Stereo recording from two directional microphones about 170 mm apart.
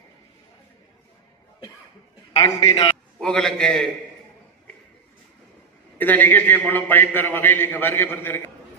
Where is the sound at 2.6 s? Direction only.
35° left (ahead or behind).